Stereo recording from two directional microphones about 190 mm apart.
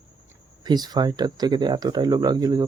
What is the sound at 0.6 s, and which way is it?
Speech, 20° right (ahead or behind).